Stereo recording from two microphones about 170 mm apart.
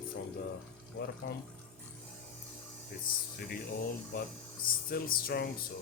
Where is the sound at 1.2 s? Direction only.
75° left (ahead or behind).